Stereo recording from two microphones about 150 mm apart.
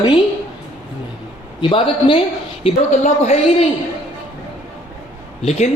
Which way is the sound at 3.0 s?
50° left (ahead or behind).